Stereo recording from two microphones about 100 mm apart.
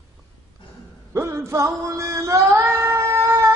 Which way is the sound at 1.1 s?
25° right (ahead or behind).